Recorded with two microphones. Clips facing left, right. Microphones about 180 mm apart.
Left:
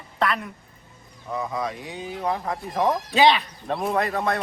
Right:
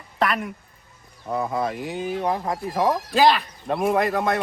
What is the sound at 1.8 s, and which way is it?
Speech, centre (ahead or behind).